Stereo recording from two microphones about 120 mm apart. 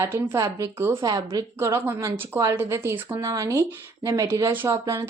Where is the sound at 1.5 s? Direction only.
20° right (ahead or behind).